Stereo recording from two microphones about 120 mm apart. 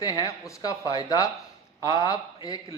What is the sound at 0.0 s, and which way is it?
A man's voice, 30° left (ahead or behind).